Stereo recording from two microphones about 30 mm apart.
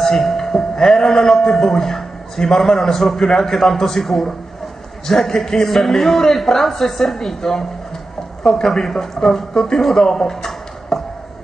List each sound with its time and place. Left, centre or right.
0.0 s a man's voice: centre
3.3 s a man's voice: centre
8.8 s a man's voice: centre
9.8 s a man's voice: centre
10.1 s a sound: centre